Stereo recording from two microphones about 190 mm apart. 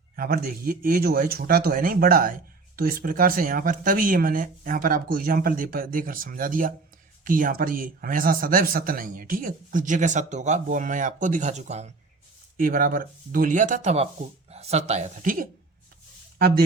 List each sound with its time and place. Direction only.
0.2 s speech: 50° right (ahead or behind)